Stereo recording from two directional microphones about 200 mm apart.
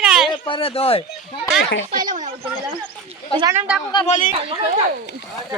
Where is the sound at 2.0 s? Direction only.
40° right (ahead or behind).